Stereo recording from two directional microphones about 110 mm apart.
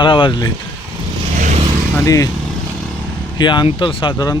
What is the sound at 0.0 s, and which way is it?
Speech, 45° left (ahead or behind).